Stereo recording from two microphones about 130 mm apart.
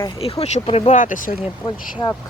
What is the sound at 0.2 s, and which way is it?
Speech, 50° left (ahead or behind).